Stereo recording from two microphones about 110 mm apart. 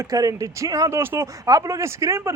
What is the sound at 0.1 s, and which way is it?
Speech, 30° right (ahead or behind).